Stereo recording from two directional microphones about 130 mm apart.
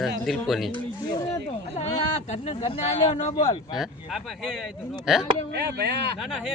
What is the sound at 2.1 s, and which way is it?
Speech, 55° left (ahead or behind).